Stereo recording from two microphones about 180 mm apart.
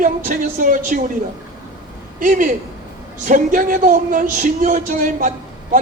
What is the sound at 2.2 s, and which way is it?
Speech, 45° right (ahead or behind).